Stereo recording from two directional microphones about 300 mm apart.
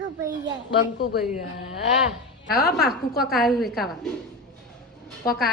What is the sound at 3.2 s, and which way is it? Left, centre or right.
Speech, centre.